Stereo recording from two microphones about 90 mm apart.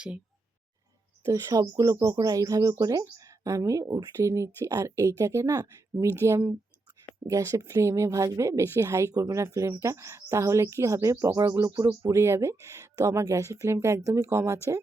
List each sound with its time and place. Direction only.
1.2 s a woman's voice: 40° right (ahead or behind)